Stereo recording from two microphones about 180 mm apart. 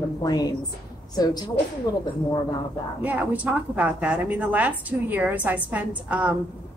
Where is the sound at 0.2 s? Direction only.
20° left (ahead or behind).